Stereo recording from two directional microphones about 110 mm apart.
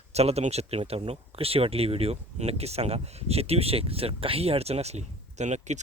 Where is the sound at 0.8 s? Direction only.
60° right (ahead or behind).